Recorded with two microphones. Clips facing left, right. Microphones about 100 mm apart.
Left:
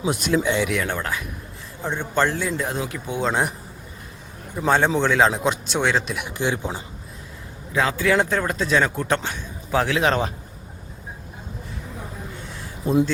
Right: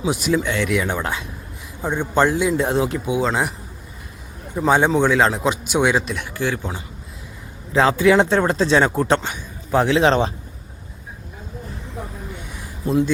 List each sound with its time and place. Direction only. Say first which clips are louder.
0.1 s speech: right 2 dB; 5° right (ahead or behind)
0.4 s speech: left 1 dB; 15° left (ahead or behind)
0.7 s speech: right 3 dB; 10° right (ahead or behind)
2.6 s speech: right 7 dB; 25° right (ahead or behind)
3.1 s speech: right 3 dB; centre (ahead or behind)
4.6 s speech: right 3 dB; 5° right (ahead or behind)
6.1 s speech: right 1 dB; 20° left (ahead or behind)
7.7 s speech: right 6 dB; 30° right (ahead or behind)
7.9 s speech: right 5 dB; 20° right (ahead or behind)
9.2 s speech: right 1 dB; 15° right (ahead or behind)